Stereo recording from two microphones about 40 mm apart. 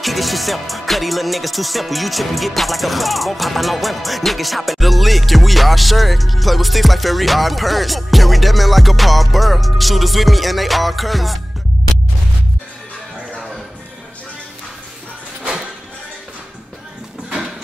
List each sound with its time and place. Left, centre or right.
0.0 s music: centre